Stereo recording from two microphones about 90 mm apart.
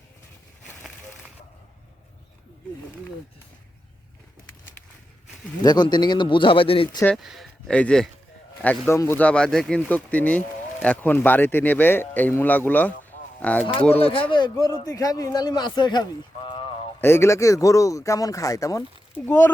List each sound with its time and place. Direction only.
5.6 s speech: 50° left (ahead or behind); by 6.8 s 85° left
7.2 s speech: 5° right (ahead or behind)
7.7 s speech: 10° left (ahead or behind)
8.9 s a man's voice: 30° left (ahead or behind)
9.2 s a man's voice: 10° left (ahead or behind)
14.0 s speech: 75° left (ahead or behind)
14.8 s speech: 40° left (ahead or behind); by 16.9 s 80° left
17.0 s speech: 30° left (ahead or behind)
19.1 s a man's voice: 25° left (ahead or behind)